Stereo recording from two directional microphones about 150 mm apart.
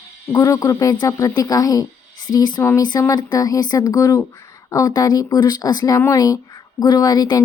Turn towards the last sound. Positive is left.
turn(degrees=25)  # may be behind; listen again after turning